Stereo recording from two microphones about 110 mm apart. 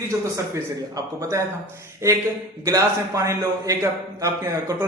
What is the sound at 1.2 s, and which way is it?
Speech, 30° right (ahead or behind).